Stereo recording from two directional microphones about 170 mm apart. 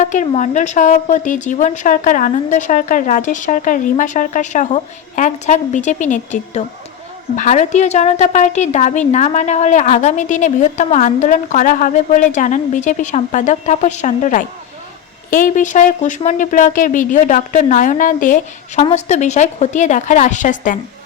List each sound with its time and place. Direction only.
0.0 s speech: 45° left (ahead or behind)
18.8 s speech: 40° left (ahead or behind)